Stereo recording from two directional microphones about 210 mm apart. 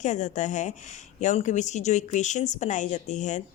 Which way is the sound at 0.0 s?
35° left (ahead or behind).